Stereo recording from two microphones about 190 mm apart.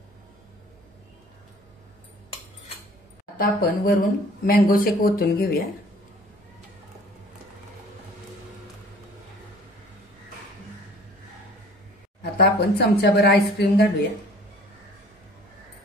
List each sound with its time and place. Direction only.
3.3 s speech: 50° left (ahead or behind)
12.2 s a woman's voice: 55° left (ahead or behind)